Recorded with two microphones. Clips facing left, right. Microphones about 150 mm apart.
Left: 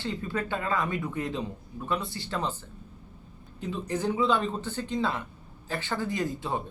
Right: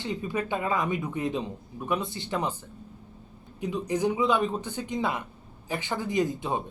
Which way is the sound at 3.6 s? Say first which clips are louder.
Right 3 dB; 15° right (ahead or behind).